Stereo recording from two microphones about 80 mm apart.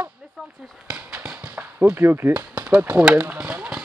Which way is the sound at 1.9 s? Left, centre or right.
Right.